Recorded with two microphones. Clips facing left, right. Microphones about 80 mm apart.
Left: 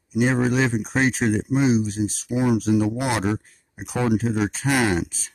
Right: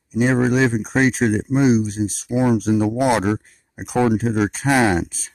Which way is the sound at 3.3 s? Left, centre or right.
Right.